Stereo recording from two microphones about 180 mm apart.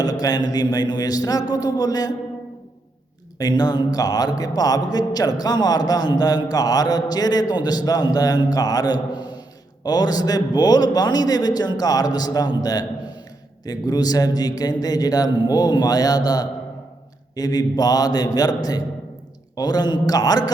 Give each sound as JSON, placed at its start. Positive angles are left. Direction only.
{"t": 0.0, "sound": "a man's voice", "side_deg": 20}
{"t": 3.3, "sound": "a man's voice", "side_deg": 20}